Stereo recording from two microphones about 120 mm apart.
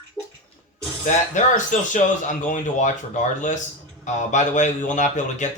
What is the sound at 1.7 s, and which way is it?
A man's voice, 90° left.